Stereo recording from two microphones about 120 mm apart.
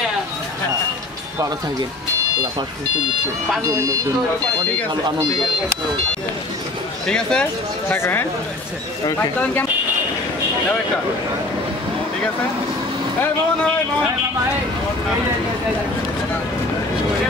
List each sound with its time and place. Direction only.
7.1 s speech: 5° left (ahead or behind)
7.9 s speech: 20° left (ahead or behind)